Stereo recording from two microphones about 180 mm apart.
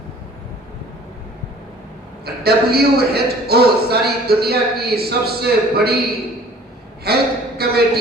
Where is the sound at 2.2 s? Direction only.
60° right (ahead or behind).